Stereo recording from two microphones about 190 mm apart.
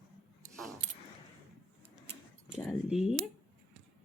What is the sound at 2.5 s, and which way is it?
Speech, 5° right (ahead or behind).